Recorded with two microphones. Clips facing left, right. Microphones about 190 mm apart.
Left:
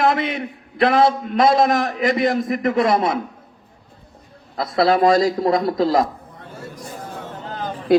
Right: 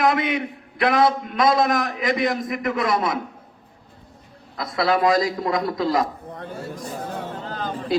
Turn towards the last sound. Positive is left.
turn(degrees=20)  # may be behind; listen again after turning